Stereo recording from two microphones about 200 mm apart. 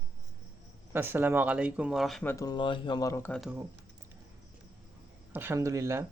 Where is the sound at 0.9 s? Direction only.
10° right (ahead or behind).